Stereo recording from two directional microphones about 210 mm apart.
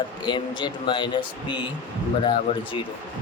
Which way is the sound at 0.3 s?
20° left (ahead or behind).